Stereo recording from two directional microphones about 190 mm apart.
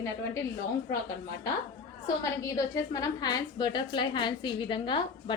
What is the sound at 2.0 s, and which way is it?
A woman's voice, 20° left (ahead or behind).